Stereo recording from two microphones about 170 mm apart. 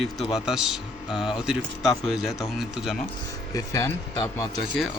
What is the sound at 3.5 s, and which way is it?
Speech, 15° left (ahead or behind).